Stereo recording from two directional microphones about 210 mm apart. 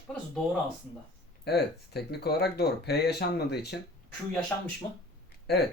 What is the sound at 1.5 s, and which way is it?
Speech, 50° left (ahead or behind).